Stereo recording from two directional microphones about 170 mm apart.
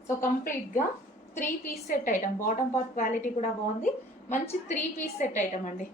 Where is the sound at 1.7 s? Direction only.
55° left (ahead or behind).